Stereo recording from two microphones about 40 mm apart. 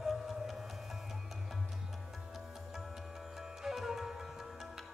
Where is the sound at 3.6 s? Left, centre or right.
Centre.